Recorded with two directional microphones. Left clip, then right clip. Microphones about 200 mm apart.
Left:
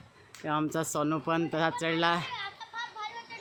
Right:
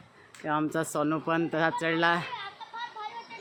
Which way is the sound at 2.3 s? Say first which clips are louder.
Even; 25° left (ahead or behind).